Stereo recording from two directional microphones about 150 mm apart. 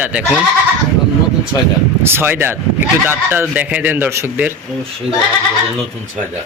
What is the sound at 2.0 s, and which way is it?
Speech, 15° right (ahead or behind).